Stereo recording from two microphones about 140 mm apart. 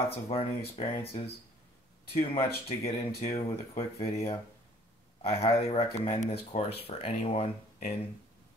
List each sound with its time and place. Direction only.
0.1 s speech: 45° left (ahead or behind)
5.2 s speech: 45° left (ahead or behind)